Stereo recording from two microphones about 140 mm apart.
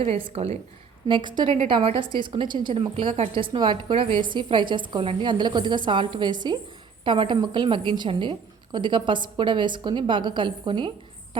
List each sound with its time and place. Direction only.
0.0 s speech: 45° right (ahead or behind)
1.0 s a woman's voice: 35° right (ahead or behind)